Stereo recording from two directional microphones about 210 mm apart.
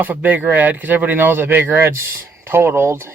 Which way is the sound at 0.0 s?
10° right (ahead or behind).